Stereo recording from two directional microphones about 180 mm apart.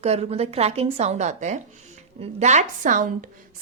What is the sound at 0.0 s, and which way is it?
Speech, 35° right (ahead or behind).